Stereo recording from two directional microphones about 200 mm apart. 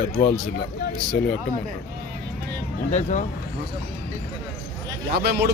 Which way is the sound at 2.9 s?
35° left (ahead or behind).